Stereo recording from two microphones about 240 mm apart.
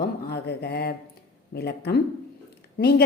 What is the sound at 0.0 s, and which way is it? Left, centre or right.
A woman's voice, left.